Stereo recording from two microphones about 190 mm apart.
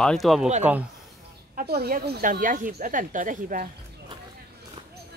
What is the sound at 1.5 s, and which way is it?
Speech, 55° right (ahead or behind).